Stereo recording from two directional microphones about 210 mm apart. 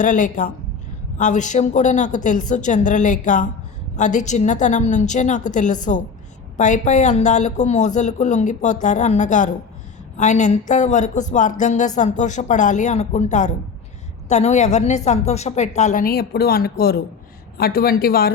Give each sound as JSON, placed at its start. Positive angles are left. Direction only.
{"t": 0.0, "sound": "a woman's voice", "side_deg": 40}